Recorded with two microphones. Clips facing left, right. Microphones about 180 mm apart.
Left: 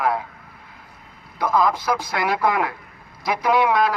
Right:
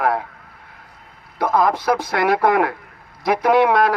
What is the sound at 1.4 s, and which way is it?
A man's voice, 60° right (ahead or behind).